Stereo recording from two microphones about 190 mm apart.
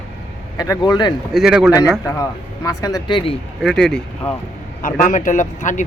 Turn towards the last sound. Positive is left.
turn(degrees=40)  # may be behind; listen again after turning